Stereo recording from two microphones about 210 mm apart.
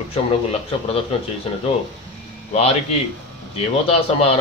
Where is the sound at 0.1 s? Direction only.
30° left (ahead or behind).